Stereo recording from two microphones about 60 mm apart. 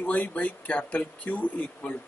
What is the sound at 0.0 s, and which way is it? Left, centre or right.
Speech, left.